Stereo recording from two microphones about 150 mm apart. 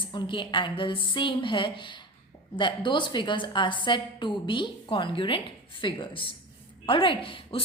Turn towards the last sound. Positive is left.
turn(degrees=35)  # may be behind; listen again after turning